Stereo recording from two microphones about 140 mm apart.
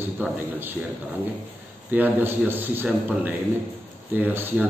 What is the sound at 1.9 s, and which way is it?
A man's voice, 15° right (ahead or behind).